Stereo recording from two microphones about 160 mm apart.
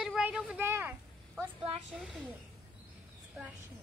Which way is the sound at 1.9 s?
5° right (ahead or behind).